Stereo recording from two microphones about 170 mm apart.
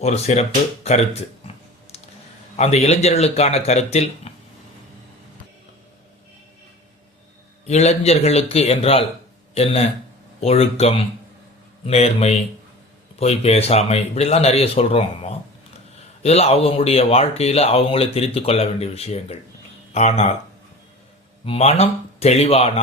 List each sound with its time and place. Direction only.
0.0 s speech: 40° left (ahead or behind)
2.6 s speech: 40° left (ahead or behind)
7.7 s speech: 40° left (ahead or behind)
21.4 s speech: 35° left (ahead or behind)